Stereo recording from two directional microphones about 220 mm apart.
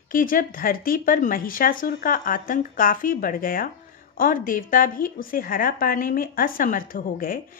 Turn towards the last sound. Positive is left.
turn(degrees=40)  # may be behind; listen again after turning